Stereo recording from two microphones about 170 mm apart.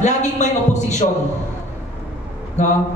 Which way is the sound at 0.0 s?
45° left (ahead or behind).